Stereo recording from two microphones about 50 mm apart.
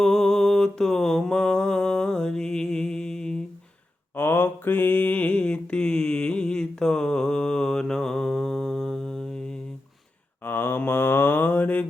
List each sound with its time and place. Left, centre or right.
0.0 s mantra: centre
4.1 s mantra: left
5.4 s mantra: centre
10.4 s mantra: left